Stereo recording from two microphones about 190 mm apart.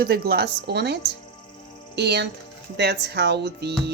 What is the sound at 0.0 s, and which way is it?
Speech, 55° right (ahead or behind).